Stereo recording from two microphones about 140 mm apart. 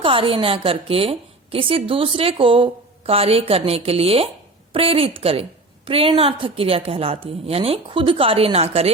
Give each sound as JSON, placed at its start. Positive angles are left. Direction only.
{"t": 0.0, "sound": "a woman's voice", "side_deg": -40}